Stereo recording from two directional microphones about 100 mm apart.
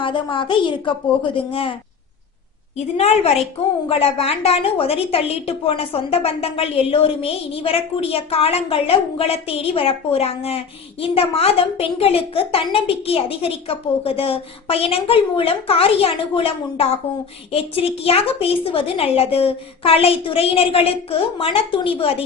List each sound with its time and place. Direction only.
0.0 s a woman's voice: 55° left (ahead or behind)
2.7 s a woman's voice: 90° left
3.8 s a woman's voice: 75° left (ahead or behind)
11.0 s a woman's voice: 70° left (ahead or behind)